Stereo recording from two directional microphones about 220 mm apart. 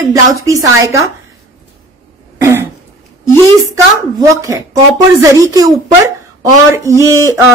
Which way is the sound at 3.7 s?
15° right (ahead or behind).